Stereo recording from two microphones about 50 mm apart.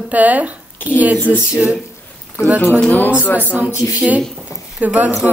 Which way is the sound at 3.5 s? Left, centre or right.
Right.